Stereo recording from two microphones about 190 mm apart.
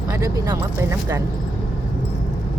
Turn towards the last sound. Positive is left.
turn(degrees=-15)  # may be behind; listen again after turning